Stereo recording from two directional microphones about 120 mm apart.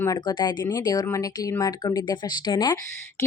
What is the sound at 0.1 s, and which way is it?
A woman's voice, 35° left (ahead or behind).